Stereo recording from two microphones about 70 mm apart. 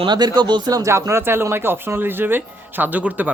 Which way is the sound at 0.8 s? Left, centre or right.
Right.